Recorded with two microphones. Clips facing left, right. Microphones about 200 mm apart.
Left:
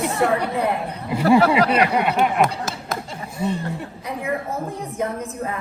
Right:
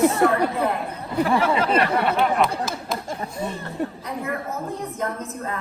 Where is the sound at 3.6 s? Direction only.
15° left (ahead or behind).